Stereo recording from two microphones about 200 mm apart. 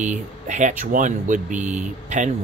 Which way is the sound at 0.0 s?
35° right (ahead or behind).